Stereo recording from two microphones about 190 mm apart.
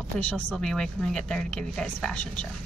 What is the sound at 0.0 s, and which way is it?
A woman's voice, 5° left (ahead or behind).